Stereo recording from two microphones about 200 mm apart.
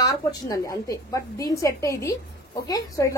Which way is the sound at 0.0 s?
20° left (ahead or behind).